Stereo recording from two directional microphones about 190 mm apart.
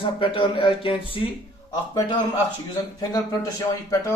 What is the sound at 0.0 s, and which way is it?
Speech, 30° left (ahead or behind).